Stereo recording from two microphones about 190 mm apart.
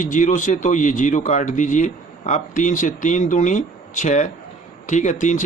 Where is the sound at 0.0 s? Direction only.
40° left (ahead or behind).